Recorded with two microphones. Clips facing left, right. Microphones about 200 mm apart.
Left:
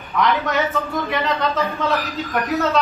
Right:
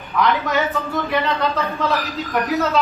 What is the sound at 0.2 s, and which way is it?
A man's voice, centre (ahead or behind).